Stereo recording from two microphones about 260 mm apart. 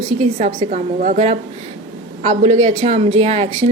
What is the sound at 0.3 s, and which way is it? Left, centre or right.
A woman's voice, right.